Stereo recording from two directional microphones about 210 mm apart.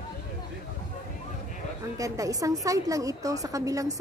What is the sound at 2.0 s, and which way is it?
A woman's voice, 15° right (ahead or behind).